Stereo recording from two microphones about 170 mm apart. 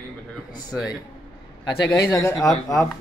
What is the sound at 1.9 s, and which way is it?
Speech, 15° left (ahead or behind).